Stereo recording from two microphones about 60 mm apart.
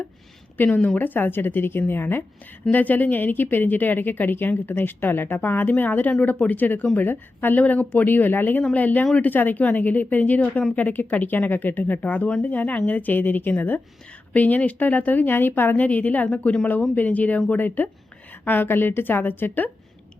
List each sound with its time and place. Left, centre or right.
0.5 s a woman's voice: left